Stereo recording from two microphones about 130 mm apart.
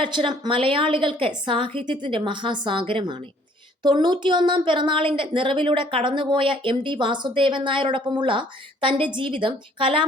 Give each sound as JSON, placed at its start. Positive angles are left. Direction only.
{"t": 0.0, "sound": "a woman's voice", "side_deg": -40}